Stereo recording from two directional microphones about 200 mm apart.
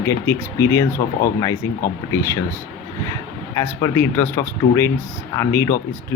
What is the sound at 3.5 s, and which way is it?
Speech, 15° left (ahead or behind).